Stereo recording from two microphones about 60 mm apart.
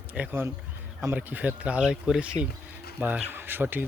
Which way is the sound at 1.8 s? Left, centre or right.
Centre.